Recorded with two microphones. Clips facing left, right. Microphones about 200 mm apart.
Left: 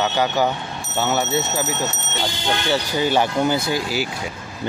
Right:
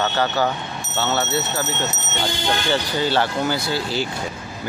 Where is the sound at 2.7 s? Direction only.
15° left (ahead or behind).